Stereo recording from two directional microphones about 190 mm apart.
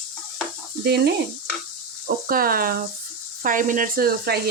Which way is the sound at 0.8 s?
60° right (ahead or behind).